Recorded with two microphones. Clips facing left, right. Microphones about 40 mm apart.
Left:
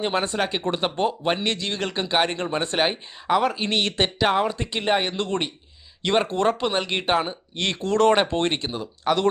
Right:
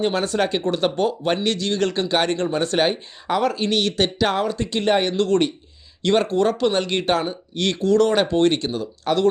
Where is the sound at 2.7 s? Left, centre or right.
Centre.